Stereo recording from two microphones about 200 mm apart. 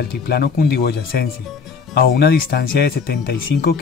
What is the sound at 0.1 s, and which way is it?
Speech, 50° left (ahead or behind).